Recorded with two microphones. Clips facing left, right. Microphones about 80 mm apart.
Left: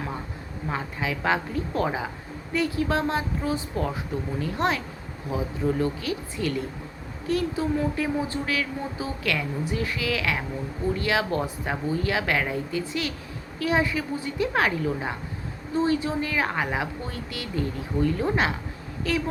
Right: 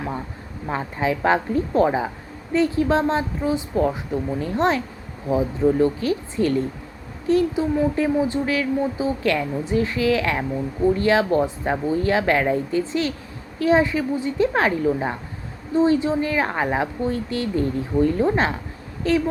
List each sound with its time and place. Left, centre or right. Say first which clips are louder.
0.7 s speech: right 6 dB; right